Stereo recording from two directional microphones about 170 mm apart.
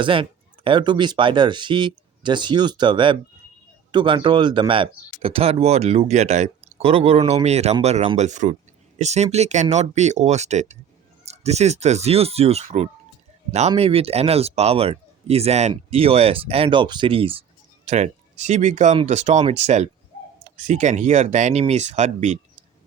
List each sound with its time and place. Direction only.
0.0 s speech: 30° right (ahead or behind)